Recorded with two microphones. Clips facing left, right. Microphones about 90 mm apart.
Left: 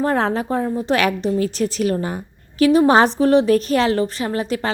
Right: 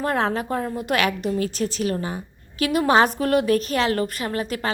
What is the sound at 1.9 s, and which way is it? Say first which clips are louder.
A woman's voice: left 4 dB; 40° left (ahead or behind).